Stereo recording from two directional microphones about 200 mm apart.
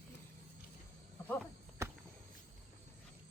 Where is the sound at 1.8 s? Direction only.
15° right (ahead or behind).